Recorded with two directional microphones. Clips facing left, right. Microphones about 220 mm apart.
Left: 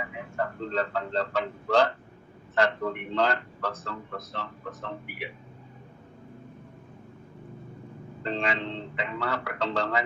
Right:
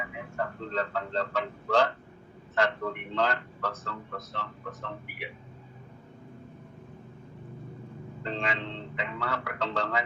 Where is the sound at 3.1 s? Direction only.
35° left (ahead or behind).